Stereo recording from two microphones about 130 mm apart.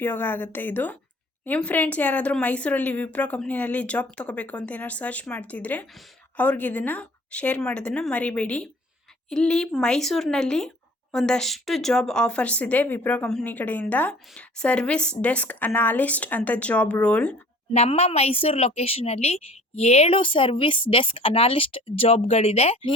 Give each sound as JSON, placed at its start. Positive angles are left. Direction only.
{"t": 0.0, "sound": "a woman's voice", "side_deg": 15}
{"t": 17.7, "sound": "a woman's voice", "side_deg": 55}